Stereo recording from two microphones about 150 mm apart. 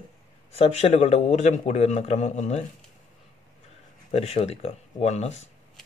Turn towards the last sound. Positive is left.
turn(degrees=45)  # may be behind; listen again after turning